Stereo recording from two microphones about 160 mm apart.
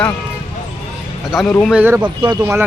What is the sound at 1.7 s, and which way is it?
Speech, 10° right (ahead or behind).